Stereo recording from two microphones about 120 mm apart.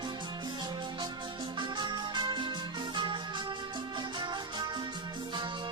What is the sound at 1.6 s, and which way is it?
Music, 40° right (ahead or behind).